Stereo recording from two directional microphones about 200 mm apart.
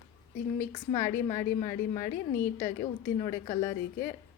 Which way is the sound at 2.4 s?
15° left (ahead or behind).